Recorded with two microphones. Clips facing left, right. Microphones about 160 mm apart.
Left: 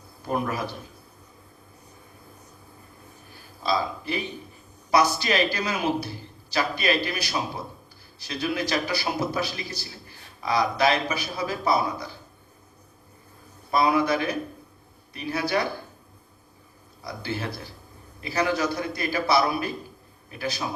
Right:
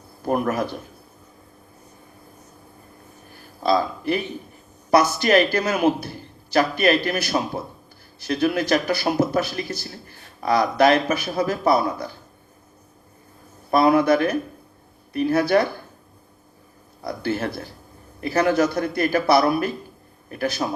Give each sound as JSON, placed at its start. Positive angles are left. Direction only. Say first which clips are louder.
{"t": 0.3, "sound": "a man's voice", "louder": "right 5 dB", "side_deg": -50}
{"t": 3.6, "sound": "a man's voice", "louder": "right 6 dB", "side_deg": -55}
{"t": 13.7, "sound": "a man's voice", "louder": "right 6 dB", "side_deg": -55}
{"t": 17.0, "sound": "a man's voice", "louder": "right 7 dB", "side_deg": -55}